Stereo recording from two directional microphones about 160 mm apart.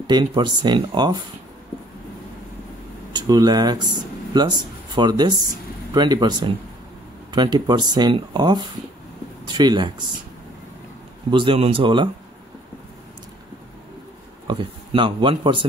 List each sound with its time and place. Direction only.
0.0 s speech: 30° right (ahead or behind)
3.1 s speech: 25° right (ahead or behind)
11.2 s speech: 30° right (ahead or behind)
14.5 s speech: 30° right (ahead or behind)